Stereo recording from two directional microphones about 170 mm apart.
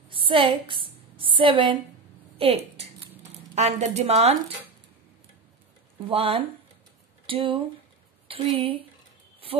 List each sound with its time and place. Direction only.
0.1 s a sound: 30° right (ahead or behind)
2.3 s speech: 35° right (ahead or behind)
6.0 s speech: 35° right (ahead or behind)